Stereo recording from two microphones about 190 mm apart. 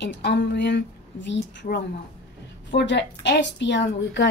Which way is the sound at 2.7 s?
65° left (ahead or behind).